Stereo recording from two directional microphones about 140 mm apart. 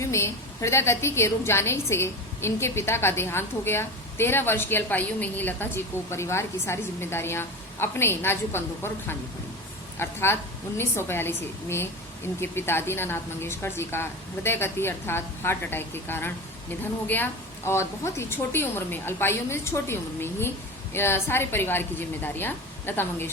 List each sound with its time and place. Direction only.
0.0 s a woman's voice: 20° left (ahead or behind)